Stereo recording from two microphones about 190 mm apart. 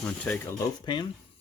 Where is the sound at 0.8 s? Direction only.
25° left (ahead or behind).